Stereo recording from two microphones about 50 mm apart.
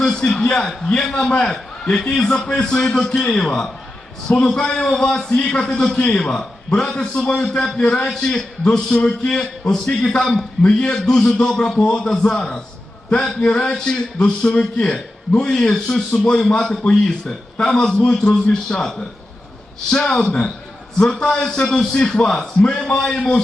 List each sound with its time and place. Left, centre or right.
0.0 s a man's voice: centre
7.1 s a man's voice: left